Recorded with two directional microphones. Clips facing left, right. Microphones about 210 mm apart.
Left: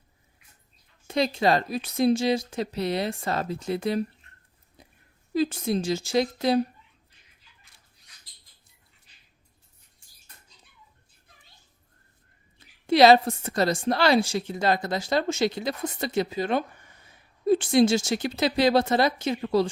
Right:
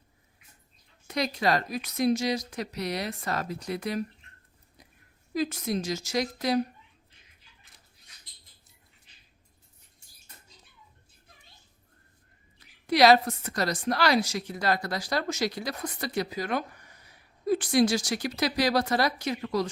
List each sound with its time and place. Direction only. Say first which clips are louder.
1.0 s a woman's voice: left 4 dB; 25° left (ahead or behind)
4.8 s a sound: left 4 dB; 25° left (ahead or behind)
5.3 s a woman's voice: left 4 dB; 30° left (ahead or behind)
12.5 s a woman's voice: left 4 dB; 25° left (ahead or behind)